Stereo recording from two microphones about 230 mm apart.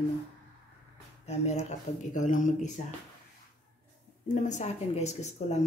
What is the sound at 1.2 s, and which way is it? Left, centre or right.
Speech, left.